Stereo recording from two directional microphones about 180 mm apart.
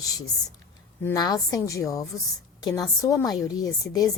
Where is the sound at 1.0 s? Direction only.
20° left (ahead or behind).